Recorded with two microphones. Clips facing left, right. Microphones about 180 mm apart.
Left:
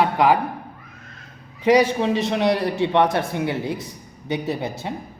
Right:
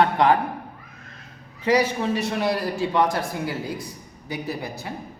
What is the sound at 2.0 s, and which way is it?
Speech, 20° left (ahead or behind).